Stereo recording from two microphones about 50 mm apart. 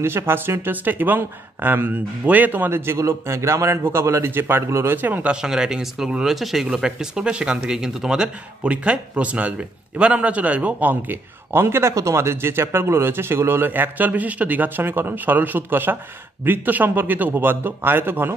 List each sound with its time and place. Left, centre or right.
0.0 s speech: right
3.0 s a man's voice: right
4.3 s speech: right
5.2 s speech: centre
8.6 s a man's voice: right
11.5 s speech: right